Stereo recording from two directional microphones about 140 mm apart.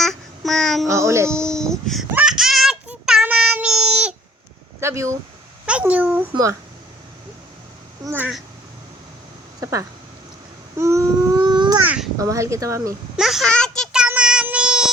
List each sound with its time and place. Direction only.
0.0 s child singing: centre (ahead or behind)
0.9 s speech: 20° right (ahead or behind)
1.3 s speech: 5° left (ahead or behind)
2.1 s child singing: 5° right (ahead or behind)
4.8 s speech: 20° right (ahead or behind)
5.6 s speech: 10° right (ahead or behind)
6.3 s speech: 25° right (ahead or behind)
8.0 s a child's voice: 15° right (ahead or behind)
9.6 s speech: 25° right (ahead or behind)
10.8 s a sound: 20° right (ahead or behind)
11.3 s babbling: 30° right (ahead or behind)
12.2 s speech: 20° right (ahead or behind)
13.1 s child singing: centre (ahead or behind)